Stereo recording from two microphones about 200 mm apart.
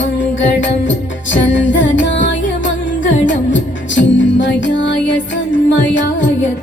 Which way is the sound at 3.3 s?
65° left (ahead or behind).